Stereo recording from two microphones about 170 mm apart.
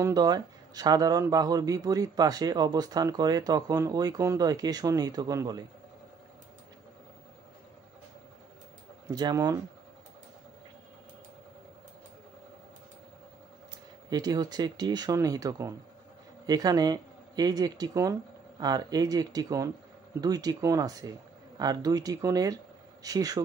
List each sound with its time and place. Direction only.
0.0 s speech: 25° right (ahead or behind)
9.1 s speech: 20° right (ahead or behind)
14.1 s speech: 25° right (ahead or behind)